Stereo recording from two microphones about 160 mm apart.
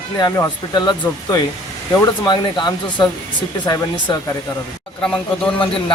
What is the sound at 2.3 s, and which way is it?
Speech, 30° left (ahead or behind).